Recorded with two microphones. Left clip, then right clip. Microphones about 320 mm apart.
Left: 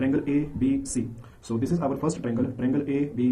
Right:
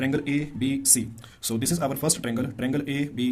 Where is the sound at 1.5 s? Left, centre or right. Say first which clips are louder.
Even; right.